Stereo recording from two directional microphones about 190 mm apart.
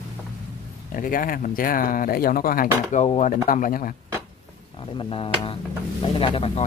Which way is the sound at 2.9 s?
35° left (ahead or behind).